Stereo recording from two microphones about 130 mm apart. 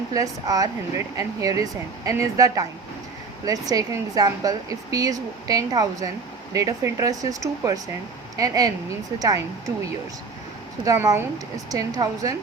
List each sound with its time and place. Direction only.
0.1 s speech: 30° right (ahead or behind)
10.8 s speech: 25° right (ahead or behind)